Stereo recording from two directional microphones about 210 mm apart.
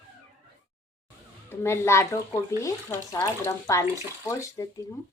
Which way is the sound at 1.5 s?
10° left (ahead or behind).